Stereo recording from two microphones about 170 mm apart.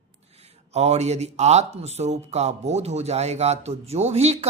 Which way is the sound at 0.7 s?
40° right (ahead or behind).